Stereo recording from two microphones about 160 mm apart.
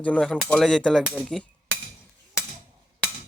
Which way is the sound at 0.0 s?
5° left (ahead or behind).